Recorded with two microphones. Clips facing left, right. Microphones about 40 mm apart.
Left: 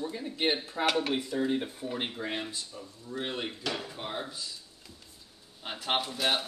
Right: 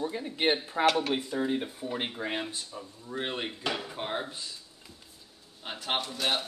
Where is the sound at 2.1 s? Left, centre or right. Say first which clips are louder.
Right 1 dB; centre.